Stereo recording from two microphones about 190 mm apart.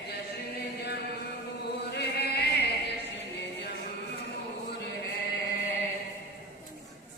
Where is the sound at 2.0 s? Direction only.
60° left (ahead or behind).